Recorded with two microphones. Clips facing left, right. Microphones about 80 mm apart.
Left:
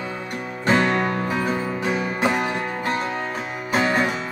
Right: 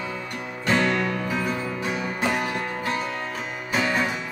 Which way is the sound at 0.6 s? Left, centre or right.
Left.